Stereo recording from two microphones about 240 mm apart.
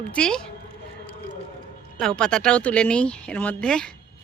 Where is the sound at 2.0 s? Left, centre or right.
Centre.